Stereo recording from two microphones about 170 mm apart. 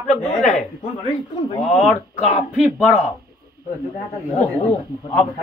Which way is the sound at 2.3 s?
40° left (ahead or behind).